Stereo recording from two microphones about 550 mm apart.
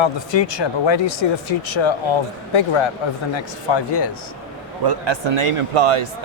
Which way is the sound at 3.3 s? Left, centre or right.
Left.